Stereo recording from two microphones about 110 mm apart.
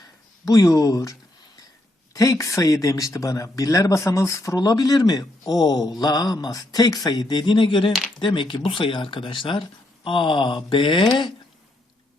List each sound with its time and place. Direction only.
0.4 s speech: 30° left (ahead or behind)
2.1 s speech: 30° left (ahead or behind); by 11.3 s 50° left (ahead or behind)